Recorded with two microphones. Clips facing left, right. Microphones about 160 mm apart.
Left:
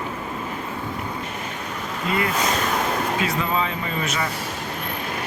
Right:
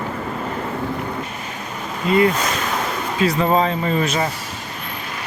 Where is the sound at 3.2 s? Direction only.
40° right (ahead or behind).